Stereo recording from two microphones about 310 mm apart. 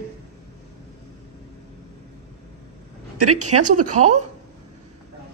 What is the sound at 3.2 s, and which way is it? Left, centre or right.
A woman's voice, right.